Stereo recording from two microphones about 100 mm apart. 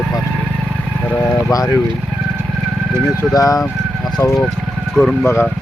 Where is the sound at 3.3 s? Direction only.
35° left (ahead or behind).